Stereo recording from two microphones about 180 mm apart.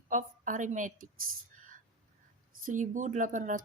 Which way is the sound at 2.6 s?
45° right (ahead or behind).